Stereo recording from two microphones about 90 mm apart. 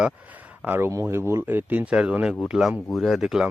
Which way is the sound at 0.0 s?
15° right (ahead or behind).